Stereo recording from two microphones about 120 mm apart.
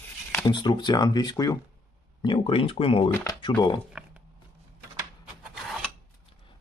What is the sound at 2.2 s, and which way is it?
Speech, 45° left (ahead or behind).